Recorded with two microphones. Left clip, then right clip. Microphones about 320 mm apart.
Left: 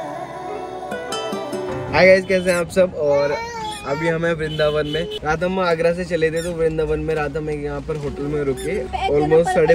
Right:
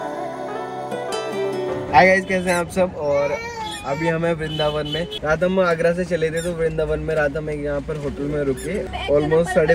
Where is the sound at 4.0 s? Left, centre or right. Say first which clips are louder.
Left 1 dB; centre.